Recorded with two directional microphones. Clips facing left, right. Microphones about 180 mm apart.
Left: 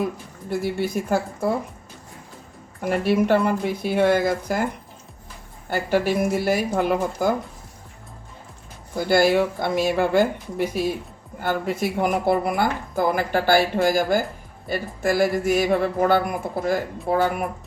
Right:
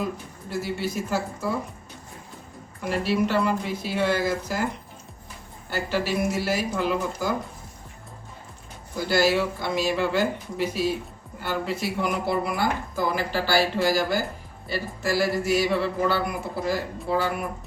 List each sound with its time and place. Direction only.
0.5 s speech: 55° left (ahead or behind)
2.9 s speech: 55° left (ahead or behind)
5.7 s speech: 50° left (ahead or behind)
9.0 s speech: 55° left (ahead or behind)